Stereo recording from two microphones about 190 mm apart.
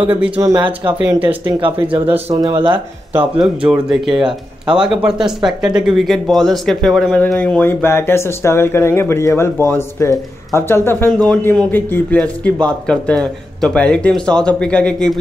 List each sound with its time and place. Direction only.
0.0 s speech: 10° right (ahead or behind); by 2.8 s 25° right (ahead or behind)
3.2 s a man's voice: 5° right (ahead or behind)